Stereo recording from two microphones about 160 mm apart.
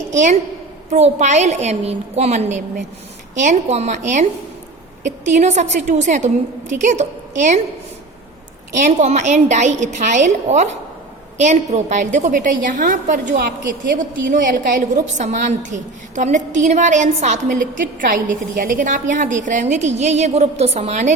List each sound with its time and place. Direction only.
0.1 s a woman's voice: 50° right (ahead or behind)
8.8 s a woman's voice: 45° right (ahead or behind)
18.0 s a woman's voice: 55° right (ahead or behind)